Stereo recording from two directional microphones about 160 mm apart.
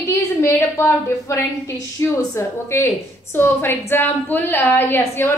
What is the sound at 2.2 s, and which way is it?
A woman's voice, 20° left (ahead or behind).